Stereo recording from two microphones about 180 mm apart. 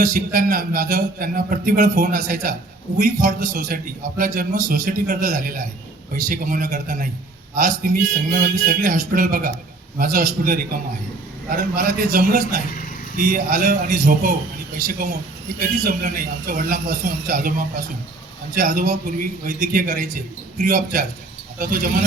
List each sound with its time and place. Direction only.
0.0 s a man's voice: 50° right (ahead or behind)